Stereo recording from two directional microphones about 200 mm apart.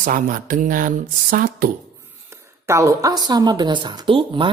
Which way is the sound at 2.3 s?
15° right (ahead or behind).